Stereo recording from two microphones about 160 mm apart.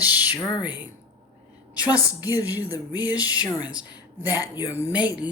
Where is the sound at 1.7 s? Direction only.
20° left (ahead or behind).